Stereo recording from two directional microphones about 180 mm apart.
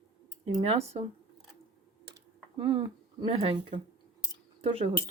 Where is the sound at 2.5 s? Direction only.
30° right (ahead or behind).